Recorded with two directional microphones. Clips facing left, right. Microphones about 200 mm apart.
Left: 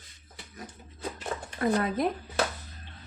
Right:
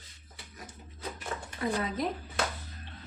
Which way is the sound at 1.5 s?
55° left (ahead or behind).